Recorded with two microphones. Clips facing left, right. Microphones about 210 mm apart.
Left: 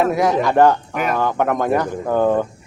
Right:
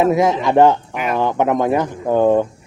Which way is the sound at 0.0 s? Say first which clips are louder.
Right 2 dB; 20° right (ahead or behind).